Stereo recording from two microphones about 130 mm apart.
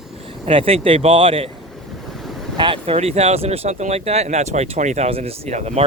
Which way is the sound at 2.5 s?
40° right (ahead or behind).